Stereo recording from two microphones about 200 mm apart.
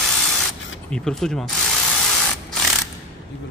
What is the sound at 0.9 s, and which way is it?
Speech, centre (ahead or behind).